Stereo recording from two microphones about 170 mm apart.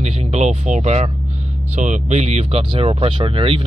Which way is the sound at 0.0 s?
40° right (ahead or behind).